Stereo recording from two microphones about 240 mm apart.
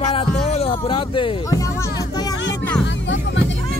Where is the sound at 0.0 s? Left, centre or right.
Left.